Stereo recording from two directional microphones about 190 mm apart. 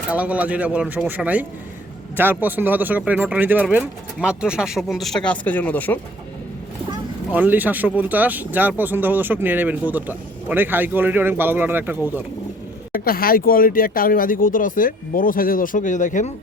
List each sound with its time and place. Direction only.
0.1 s speech: 5° right (ahead or behind); by 6.0 s 10° left (ahead or behind)
7.3 s speech: 10° right (ahead or behind)
13.1 s speech: 50° left (ahead or behind)